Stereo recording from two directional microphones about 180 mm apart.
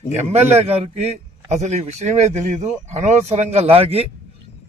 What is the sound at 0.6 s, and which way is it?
A man's voice, 35° right (ahead or behind).